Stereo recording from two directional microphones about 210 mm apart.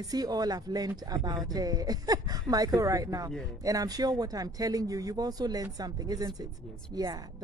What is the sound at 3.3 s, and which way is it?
Speech, centre (ahead or behind).